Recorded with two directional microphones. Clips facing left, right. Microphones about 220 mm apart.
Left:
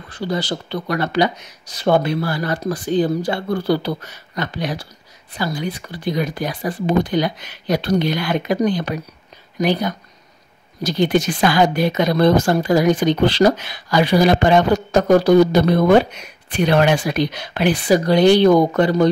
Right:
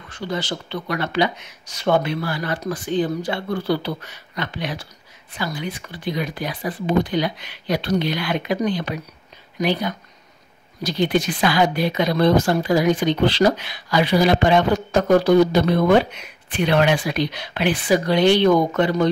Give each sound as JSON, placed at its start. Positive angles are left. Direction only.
{"t": 0.1, "sound": "speech", "side_deg": 35}